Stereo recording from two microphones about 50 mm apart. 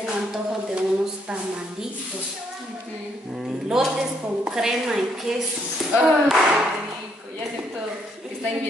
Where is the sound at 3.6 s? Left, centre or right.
Centre.